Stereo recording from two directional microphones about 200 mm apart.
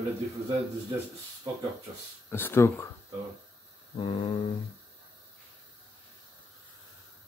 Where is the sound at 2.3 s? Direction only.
10° left (ahead or behind).